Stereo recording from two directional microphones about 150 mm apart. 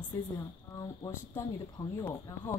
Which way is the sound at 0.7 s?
25° left (ahead or behind).